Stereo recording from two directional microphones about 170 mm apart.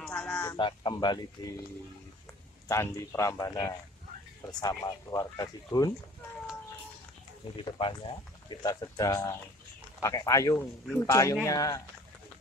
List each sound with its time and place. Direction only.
0.0 s a sound: 5° left (ahead or behind)
0.6 s speech: 30° left (ahead or behind)
2.7 s speech: 15° left (ahead or behind)
7.6 s a man's voice: 25° left (ahead or behind)